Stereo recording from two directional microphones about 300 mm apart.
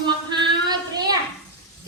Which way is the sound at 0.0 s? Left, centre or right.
Centre.